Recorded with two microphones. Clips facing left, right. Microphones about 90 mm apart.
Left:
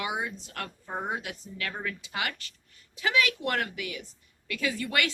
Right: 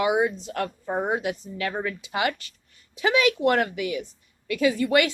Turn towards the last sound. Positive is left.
turn(degrees=-20)  # may be behind; listen again after turning